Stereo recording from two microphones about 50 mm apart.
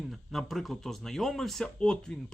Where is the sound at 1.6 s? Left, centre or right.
Centre.